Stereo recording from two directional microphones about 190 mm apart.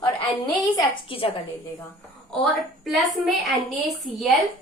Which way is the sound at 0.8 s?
30° left (ahead or behind).